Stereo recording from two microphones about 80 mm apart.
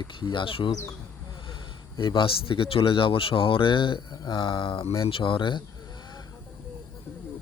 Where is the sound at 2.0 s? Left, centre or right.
Left.